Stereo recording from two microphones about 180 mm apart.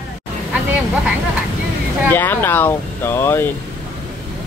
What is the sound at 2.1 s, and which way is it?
Speech, 10° left (ahead or behind).